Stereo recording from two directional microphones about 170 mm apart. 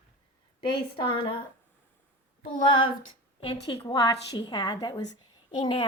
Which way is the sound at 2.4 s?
30° left (ahead or behind).